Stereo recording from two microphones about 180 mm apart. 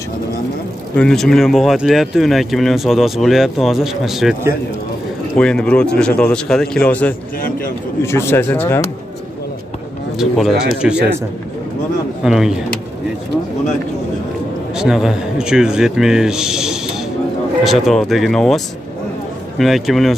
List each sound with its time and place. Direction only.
0.9 s speech: 5° left (ahead or behind)
7.3 s a man's voice: 50° left (ahead or behind)
8.0 s speech: 15° left (ahead or behind)
10.1 s speech: centre (ahead or behind)
12.2 s speech: 5° right (ahead or behind)
14.8 s speech: 5° right (ahead or behind)
19.6 s speech: centre (ahead or behind)